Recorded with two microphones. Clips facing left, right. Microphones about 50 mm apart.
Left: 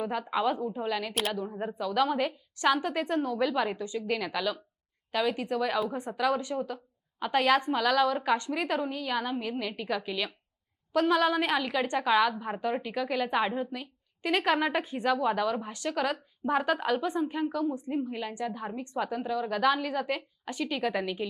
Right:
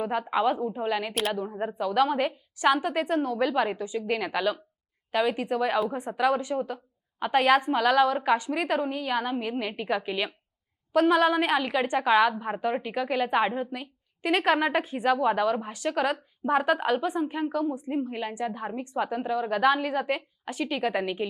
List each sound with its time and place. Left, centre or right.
0.0 s a woman's voice: centre
1.1 s speech: centre
1.4 s a woman's voice: centre